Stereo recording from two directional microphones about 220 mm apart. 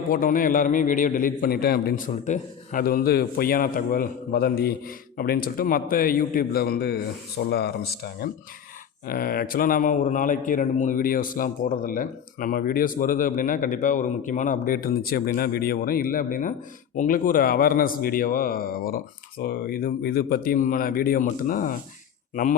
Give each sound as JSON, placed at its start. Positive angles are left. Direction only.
{"t": 0.1, "sound": "a man's voice", "side_deg": 40}